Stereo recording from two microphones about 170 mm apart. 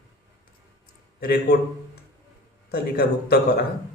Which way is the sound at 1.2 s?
70° left (ahead or behind).